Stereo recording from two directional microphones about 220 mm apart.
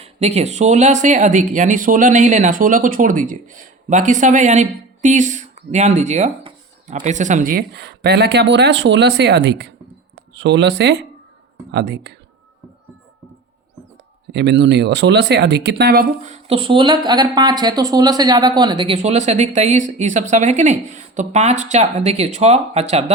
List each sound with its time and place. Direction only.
0.0 s speech: 30° right (ahead or behind); by 12.1 s 50° right (ahead or behind)
14.3 s speech: 50° right (ahead or behind); by 23.1 s 30° right (ahead or behind)